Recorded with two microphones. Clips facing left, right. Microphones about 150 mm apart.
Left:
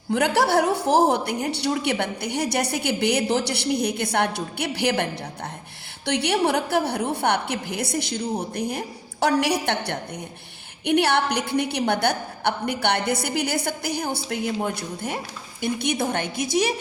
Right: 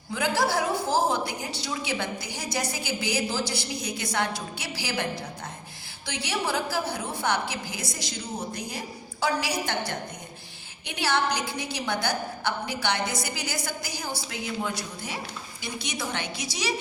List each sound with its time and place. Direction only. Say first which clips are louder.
0.1 s a woman's voice: left 6 dB; 65° left (ahead or behind)